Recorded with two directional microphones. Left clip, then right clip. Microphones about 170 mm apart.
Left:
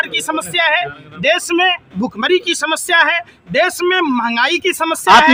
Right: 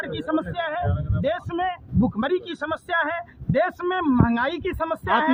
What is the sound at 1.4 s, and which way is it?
Speech, 50° left (ahead or behind).